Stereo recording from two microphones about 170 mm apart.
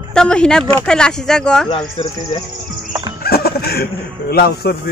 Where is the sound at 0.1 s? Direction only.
5° left (ahead or behind).